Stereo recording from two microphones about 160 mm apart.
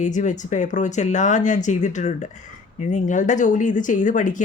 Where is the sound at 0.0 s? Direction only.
50° left (ahead or behind).